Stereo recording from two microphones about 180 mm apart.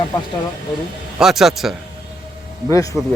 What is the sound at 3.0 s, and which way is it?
Speech, centre (ahead or behind).